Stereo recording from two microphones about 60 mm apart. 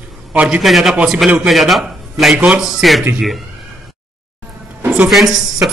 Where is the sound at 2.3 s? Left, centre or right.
Right.